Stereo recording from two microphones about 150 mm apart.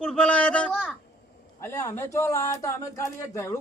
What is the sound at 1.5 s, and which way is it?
A man's voice, 20° left (ahead or behind).